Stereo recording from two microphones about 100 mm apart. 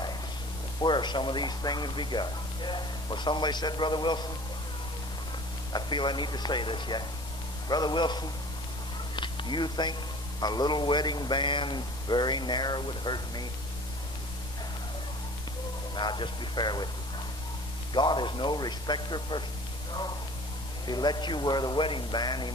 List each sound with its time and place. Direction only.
0.7 s speech: 50° left (ahead or behind)
5.7 s speech: 50° left (ahead or behind)
9.1 s music: 50° left (ahead or behind)
10.4 s speech: 45° left (ahead or behind)
15.9 s speech: 50° left (ahead or behind)
17.9 s speech: 50° left (ahead or behind)
20.8 s speech: 45° left (ahead or behind)